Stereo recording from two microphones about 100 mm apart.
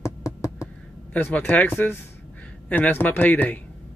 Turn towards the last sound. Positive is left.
turn(degrees=15)  # may be behind; listen again after turning